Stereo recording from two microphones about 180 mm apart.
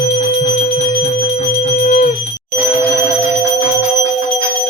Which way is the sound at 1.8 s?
45° left (ahead or behind).